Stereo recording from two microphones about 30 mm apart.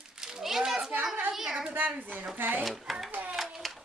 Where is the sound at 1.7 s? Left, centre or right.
Right.